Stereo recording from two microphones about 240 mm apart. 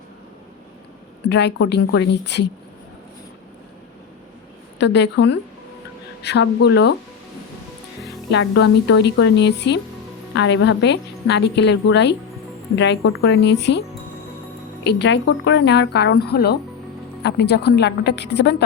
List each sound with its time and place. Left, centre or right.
1.3 s a woman's voice: left
4.8 s a woman's voice: left
8.3 s a woman's voice: left
14.8 s a woman's voice: left